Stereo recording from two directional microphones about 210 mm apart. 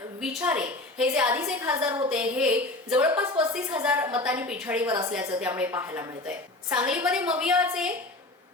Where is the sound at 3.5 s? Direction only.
5° right (ahead or behind).